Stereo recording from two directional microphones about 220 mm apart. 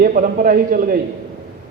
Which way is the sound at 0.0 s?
40° right (ahead or behind).